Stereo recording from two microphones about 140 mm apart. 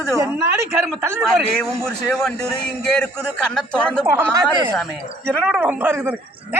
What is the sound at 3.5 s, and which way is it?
Speech, 5° left (ahead or behind).